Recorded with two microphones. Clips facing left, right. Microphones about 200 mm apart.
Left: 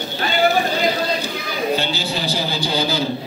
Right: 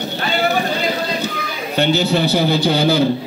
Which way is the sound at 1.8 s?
60° right (ahead or behind).